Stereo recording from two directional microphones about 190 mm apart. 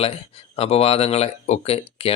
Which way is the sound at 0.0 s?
30° left (ahead or behind).